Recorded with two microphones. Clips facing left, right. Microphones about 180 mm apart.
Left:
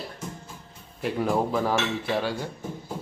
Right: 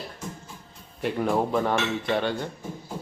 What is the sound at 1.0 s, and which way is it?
Dishes, centre (ahead or behind).